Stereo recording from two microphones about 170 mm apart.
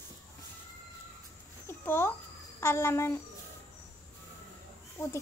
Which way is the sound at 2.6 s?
15° left (ahead or behind).